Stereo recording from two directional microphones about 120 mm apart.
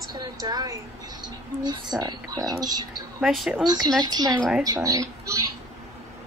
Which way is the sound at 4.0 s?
35° right (ahead or behind).